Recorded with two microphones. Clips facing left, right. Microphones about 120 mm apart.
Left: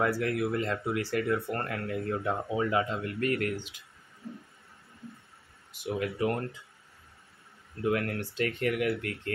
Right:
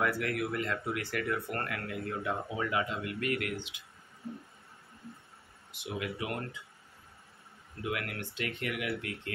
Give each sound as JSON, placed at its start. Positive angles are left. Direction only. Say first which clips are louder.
{"t": 0.0, "sound": "speech", "louder": "left 4 dB", "side_deg": 25}
{"t": 5.7, "sound": "speech", "louder": "left 5 dB", "side_deg": 40}
{"t": 7.8, "sound": "speech", "louder": "left 7 dB", "side_deg": 35}